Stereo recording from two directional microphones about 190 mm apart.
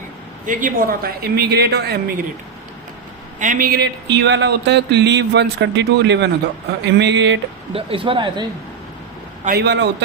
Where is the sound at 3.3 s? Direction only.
40° right (ahead or behind); by 7.3 s 65° right (ahead or behind).